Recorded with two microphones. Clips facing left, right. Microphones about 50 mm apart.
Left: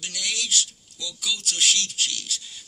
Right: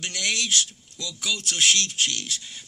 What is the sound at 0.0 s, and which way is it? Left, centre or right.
A man's voice, right.